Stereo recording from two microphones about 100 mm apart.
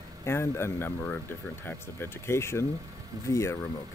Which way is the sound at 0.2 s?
25° left (ahead or behind).